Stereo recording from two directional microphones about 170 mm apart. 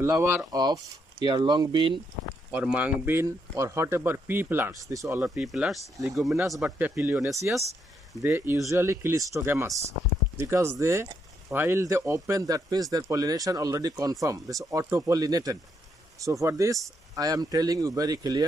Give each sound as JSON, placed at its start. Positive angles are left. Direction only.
{"t": 0.0, "sound": "speech", "side_deg": -15}
{"t": 2.5, "sound": "speech", "side_deg": -5}